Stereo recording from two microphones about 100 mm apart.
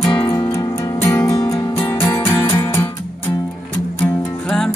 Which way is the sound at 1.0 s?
25° left (ahead or behind).